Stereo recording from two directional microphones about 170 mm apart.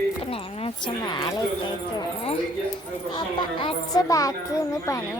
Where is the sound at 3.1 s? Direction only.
30° left (ahead or behind).